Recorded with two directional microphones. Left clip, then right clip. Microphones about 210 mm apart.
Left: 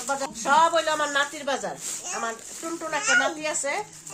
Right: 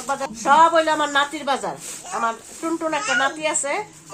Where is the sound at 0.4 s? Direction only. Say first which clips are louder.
Right 6 dB; 30° right (ahead or behind).